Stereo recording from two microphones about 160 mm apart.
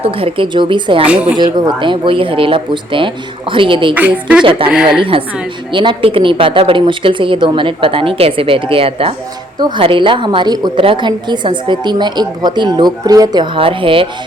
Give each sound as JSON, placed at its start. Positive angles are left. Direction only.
{"t": 0.0, "sound": "a woman's voice", "side_deg": -35}
{"t": 1.0, "sound": "a woman's voice", "side_deg": -5}
{"t": 1.4, "sound": "a woman's voice", "side_deg": -30}
{"t": 3.9, "sound": "a woman's voice", "side_deg": -10}
{"t": 4.4, "sound": "a woman's voice", "side_deg": -35}
{"t": 4.7, "sound": "a woman's voice", "side_deg": -5}
{"t": 5.7, "sound": "a woman's voice", "side_deg": -30}